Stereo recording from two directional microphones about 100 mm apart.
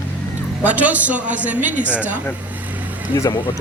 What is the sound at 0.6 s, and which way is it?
Speech, 15° right (ahead or behind).